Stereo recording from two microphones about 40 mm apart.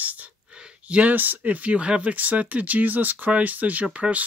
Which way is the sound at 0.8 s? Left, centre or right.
Right.